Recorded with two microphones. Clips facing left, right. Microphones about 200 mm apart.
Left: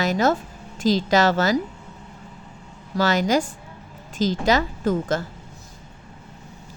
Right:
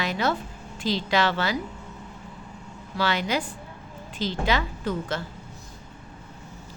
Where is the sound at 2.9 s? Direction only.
40° left (ahead or behind).